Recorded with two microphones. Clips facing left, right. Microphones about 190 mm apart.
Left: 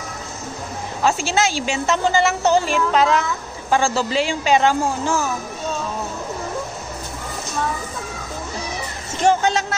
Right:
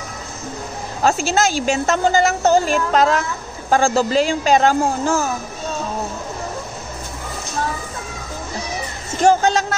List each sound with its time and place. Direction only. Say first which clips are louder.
1.0 s a woman's voice: right 2 dB; 45° right (ahead or behind)
9.2 s speech: right 3 dB; 40° right (ahead or behind)